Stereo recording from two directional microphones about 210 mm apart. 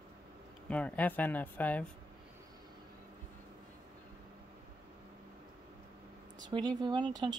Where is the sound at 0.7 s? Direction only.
5° left (ahead or behind).